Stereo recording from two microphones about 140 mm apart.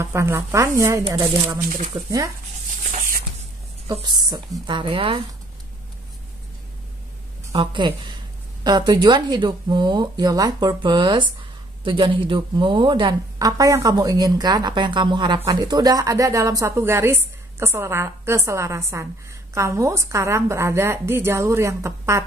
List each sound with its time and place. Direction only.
0.0 s a woman's voice: 20° right (ahead or behind)
1.6 s speech: 85° right
2.0 s a woman's voice: 25° right (ahead or behind)
2.8 s a sound: 60° right (ahead or behind)
3.8 s speech: 35° right (ahead or behind)
7.5 s a woman's voice: 35° right (ahead or behind)